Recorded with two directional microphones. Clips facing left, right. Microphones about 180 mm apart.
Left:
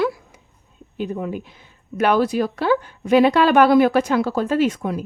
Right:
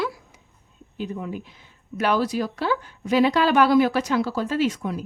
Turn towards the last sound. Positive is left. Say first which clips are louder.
# left 4 dB
turn(degrees=55)  # may be behind; listen again after turning